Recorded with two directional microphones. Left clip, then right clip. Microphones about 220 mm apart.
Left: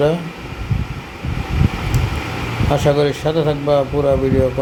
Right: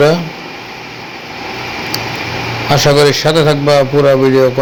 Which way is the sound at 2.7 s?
15° right (ahead or behind).